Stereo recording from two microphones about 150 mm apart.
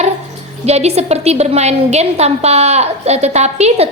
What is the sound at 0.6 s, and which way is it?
A woman's voice, 45° right (ahead or behind).